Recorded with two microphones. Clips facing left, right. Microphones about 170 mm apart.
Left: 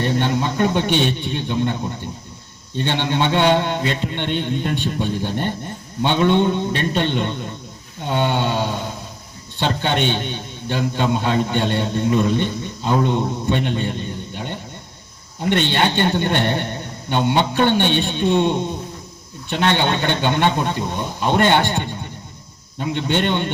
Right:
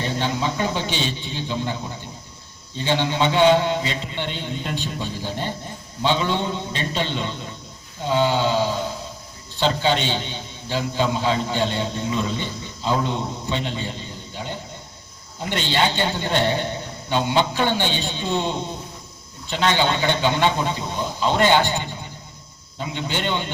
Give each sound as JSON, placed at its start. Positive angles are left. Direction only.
{"t": 0.0, "sound": "a man's voice", "side_deg": 60}